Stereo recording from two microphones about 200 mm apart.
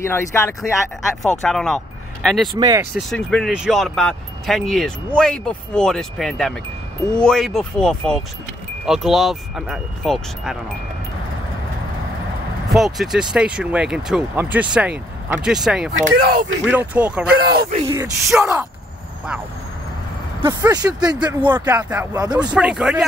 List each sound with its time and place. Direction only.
0.0 s speech: 10° left (ahead or behind)
1.2 s speech: centre (ahead or behind)
2.5 s speech: 15° right (ahead or behind)
3.0 s speech: centre (ahead or behind)
12.6 s speech: centre (ahead or behind)
16.2 s speech: 50° right (ahead or behind)
16.6 s speech: 5° right (ahead or behind)
17.5 s speech: 50° right (ahead or behind)
17.8 s speech: 20° right (ahead or behind)
18.3 s speech: 5° right (ahead or behind)
20.4 s speech: 20° right (ahead or behind)
21.6 s speech: 10° right (ahead or behind)
22.1 s speech: 20° right (ahead or behind)
22.4 s speech: 5° right (ahead or behind)